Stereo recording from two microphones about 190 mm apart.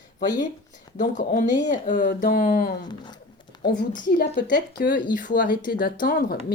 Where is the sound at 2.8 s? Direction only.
20° left (ahead or behind).